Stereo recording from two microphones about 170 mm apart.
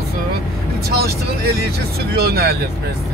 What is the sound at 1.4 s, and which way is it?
Speech, 65° right (ahead or behind).